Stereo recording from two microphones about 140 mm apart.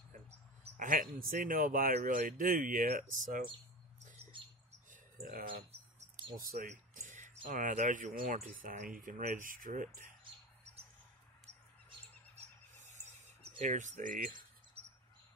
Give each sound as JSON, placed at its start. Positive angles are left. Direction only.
{"t": 0.7, "sound": "speech", "side_deg": -75}
{"t": 1.2, "sound": "speech", "side_deg": -85}
{"t": 2.0, "sound": "speech", "side_deg": -80}
{"t": 4.3, "sound": "bird", "side_deg": -35}
{"t": 4.9, "sound": "a sound", "side_deg": -85}
{"t": 5.5, "sound": "rodents", "side_deg": -45}
{"t": 6.7, "sound": "a sound", "side_deg": -65}
{"t": 7.4, "sound": "speech", "side_deg": -70}
{"t": 8.6, "sound": "speech", "side_deg": -80}
{"t": 12.7, "sound": "cricket", "side_deg": -55}
{"t": 13.6, "sound": "speech", "side_deg": -65}